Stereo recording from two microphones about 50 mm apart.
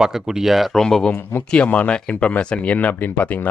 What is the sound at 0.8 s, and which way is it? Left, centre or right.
Speech, centre.